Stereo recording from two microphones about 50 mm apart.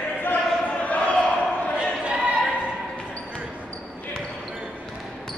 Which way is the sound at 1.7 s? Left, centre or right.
Right.